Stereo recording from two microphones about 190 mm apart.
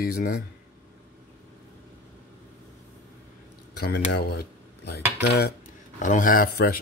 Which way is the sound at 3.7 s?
55° left (ahead or behind).